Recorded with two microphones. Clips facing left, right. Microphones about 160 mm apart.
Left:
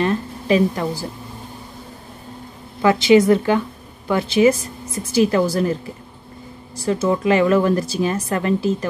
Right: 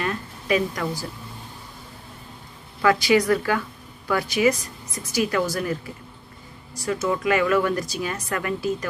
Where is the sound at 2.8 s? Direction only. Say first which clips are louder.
Left 6 dB; 25° left (ahead or behind).